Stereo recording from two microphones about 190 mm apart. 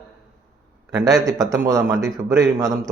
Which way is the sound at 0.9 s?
15° right (ahead or behind).